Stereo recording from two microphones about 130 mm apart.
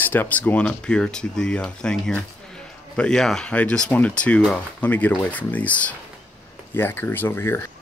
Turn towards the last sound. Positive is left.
turn(degrees=15)  # may be behind; listen again after turning